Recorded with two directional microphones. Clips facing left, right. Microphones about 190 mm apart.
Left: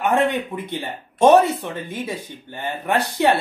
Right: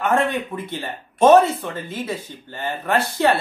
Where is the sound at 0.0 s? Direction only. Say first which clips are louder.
Left 1 dB; 15° left (ahead or behind).